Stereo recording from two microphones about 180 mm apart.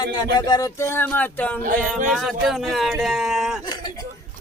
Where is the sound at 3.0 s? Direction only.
Centre (ahead or behind).